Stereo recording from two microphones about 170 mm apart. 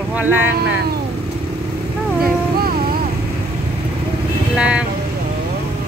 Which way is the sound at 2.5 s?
60° right (ahead or behind).